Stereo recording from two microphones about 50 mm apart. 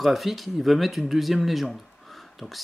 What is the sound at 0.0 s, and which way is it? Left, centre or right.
Speech, centre.